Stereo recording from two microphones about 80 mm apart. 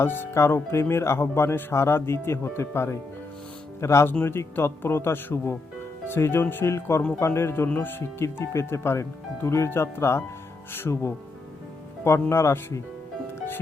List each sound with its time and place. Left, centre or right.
0.0 s speech: left
4.1 s a man's voice: left
12.3 s speech: left